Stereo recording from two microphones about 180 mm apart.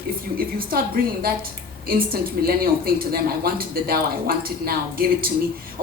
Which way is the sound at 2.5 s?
55° right (ahead or behind).